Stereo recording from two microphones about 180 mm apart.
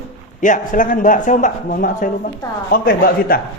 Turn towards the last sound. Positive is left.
turn(degrees=55)  # may be behind; listen again after turning